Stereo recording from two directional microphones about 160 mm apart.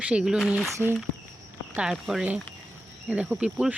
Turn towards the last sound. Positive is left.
turn(degrees=-5)  # may be behind; listen again after turning